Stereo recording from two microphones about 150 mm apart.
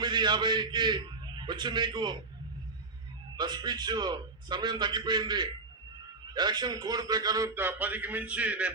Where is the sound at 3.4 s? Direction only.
30° right (ahead or behind).